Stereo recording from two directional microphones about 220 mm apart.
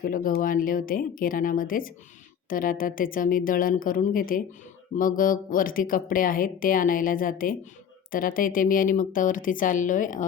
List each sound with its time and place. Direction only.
0.0 s speech: 40° left (ahead or behind)